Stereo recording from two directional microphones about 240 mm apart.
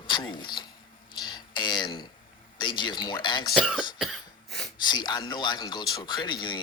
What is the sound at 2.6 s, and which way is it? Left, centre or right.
Speech, centre.